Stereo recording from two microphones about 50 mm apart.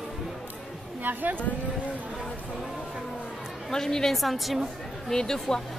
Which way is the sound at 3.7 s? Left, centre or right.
Centre.